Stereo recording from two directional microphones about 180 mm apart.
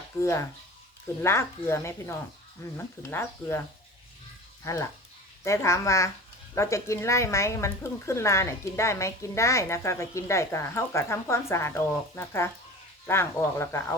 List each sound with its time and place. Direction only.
0.2 s speech: 15° left (ahead or behind)
4.6 s speech: 15° left (ahead or behind)